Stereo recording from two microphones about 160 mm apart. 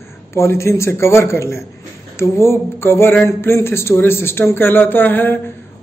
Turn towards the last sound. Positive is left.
turn(degrees=10)  # may be behind; listen again after turning